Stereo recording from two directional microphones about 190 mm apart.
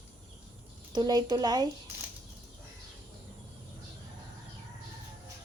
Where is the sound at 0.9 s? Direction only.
20° right (ahead or behind).